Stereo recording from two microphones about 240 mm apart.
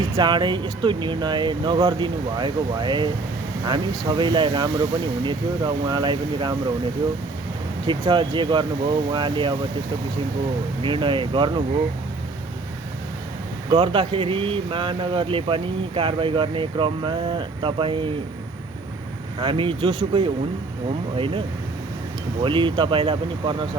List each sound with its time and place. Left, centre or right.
0.2 s speech: centre
7.9 s speech: centre
10.8 s speech: right
13.7 s speech: centre
19.4 s speech: right
21.2 s speech: right